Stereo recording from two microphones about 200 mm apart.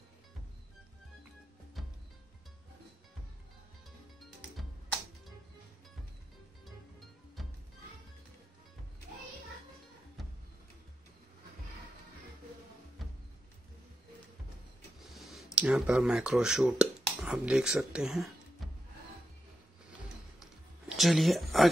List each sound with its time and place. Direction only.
1.8 s music: centre (ahead or behind)
4.2 s music: centre (ahead or behind)
6.6 s music: centre (ahead or behind)
13.0 s music: centre (ahead or behind)
15.0 s speech: centre (ahead or behind)
18.6 s music: centre (ahead or behind)
20.9 s speech: centre (ahead or behind)